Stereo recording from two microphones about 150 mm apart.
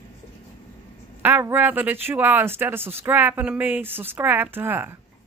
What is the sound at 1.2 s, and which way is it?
Speech, 15° right (ahead or behind).